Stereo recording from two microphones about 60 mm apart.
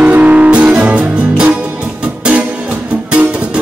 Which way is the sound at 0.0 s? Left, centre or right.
Right.